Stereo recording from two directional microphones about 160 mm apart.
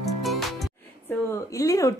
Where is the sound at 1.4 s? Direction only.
20° left (ahead or behind).